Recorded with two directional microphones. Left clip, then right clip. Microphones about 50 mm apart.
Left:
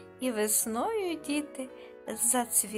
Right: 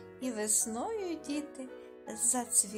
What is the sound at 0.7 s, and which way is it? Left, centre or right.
Speech, left.